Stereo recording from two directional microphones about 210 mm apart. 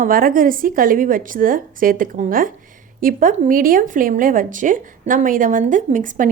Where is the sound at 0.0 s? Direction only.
45° right (ahead or behind).